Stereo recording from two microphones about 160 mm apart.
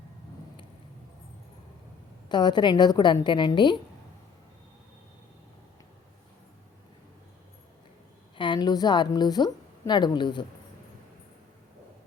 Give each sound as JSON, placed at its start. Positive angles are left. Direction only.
{"t": 2.3, "sound": "a woman's voice", "side_deg": 30}
{"t": 8.4, "sound": "a woman's voice", "side_deg": 30}